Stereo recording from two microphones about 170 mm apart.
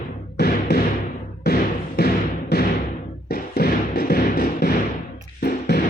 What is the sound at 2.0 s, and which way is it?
Thump, 60° left (ahead or behind).